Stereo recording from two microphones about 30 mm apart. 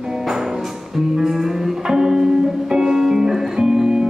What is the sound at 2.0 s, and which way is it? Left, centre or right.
Music, centre.